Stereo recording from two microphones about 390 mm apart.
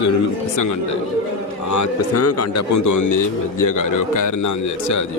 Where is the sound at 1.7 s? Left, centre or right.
Left.